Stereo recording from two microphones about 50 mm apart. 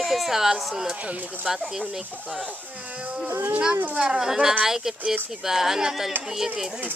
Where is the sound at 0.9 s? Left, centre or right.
Right.